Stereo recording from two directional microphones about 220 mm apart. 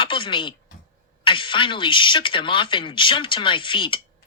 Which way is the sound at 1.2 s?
20° left (ahead or behind).